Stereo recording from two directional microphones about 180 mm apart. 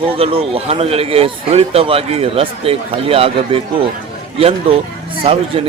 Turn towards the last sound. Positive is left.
turn(degrees=-30)  # may be behind; listen again after turning